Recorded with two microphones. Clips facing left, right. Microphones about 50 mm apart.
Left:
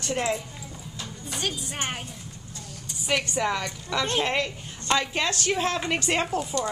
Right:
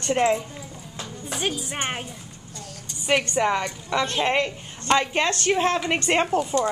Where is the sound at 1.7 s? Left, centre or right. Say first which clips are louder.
Right 3 dB; centre.